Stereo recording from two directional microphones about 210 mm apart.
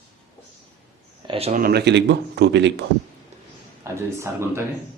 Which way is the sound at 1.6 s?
50° right (ahead or behind).